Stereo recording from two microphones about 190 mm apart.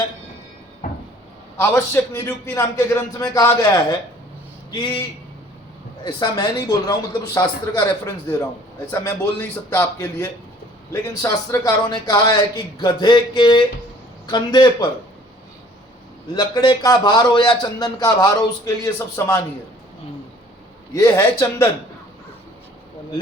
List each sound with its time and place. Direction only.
1.5 s a man's voice: 15° left (ahead or behind)
6.1 s a man's voice: 20° left (ahead or behind)
16.3 s a man's voice: 20° left (ahead or behind)
20.9 s a man's voice: 15° left (ahead or behind)